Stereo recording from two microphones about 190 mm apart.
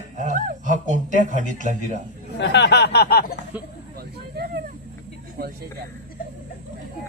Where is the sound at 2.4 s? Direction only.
65° left (ahead or behind).